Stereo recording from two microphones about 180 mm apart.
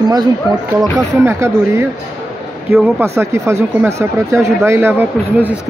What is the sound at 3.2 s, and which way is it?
Speech, 15° right (ahead or behind).